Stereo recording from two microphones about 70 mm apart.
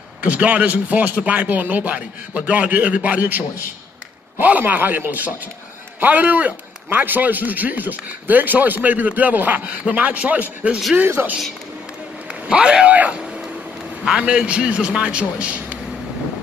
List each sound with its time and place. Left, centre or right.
0.3 s a man's voice: centre
11.2 s speech: right
12.3 s a man's voice: centre